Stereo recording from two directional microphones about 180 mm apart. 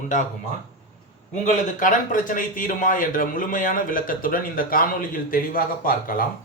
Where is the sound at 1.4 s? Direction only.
45° left (ahead or behind).